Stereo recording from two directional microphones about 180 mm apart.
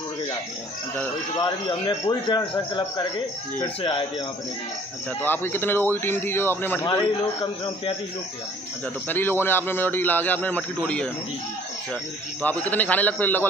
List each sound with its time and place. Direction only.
1.3 s speech: 25° left (ahead or behind)
5.2 s a man's voice: 10° left (ahead or behind)
9.1 s a man's voice: 10° left (ahead or behind)